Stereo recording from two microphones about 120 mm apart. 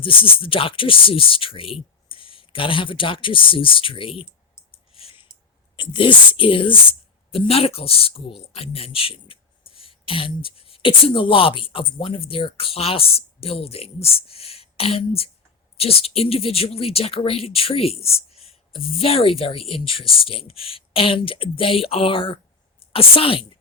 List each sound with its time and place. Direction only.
0.0 s speech: 45° left (ahead or behind)
4.7 s a sound: 50° left (ahead or behind)
5.7 s a woman's voice: 45° left (ahead or behind)